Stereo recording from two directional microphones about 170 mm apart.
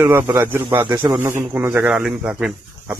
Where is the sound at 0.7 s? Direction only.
25° right (ahead or behind).